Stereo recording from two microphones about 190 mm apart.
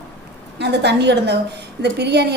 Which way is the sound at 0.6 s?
60° right (ahead or behind).